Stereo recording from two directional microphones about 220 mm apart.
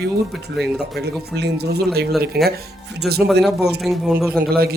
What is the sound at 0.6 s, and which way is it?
Speech, 50° right (ahead or behind).